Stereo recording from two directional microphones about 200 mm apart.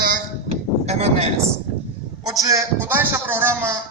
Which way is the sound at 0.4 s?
30° right (ahead or behind).